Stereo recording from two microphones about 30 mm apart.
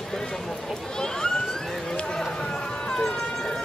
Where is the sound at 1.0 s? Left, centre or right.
Left.